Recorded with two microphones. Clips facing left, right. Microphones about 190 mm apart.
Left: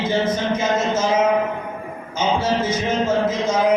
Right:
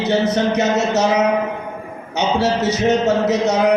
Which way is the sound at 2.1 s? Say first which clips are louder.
Right 2 dB; 75° right (ahead or behind).